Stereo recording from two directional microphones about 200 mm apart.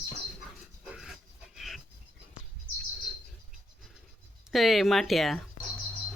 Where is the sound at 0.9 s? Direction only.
Centre (ahead or behind).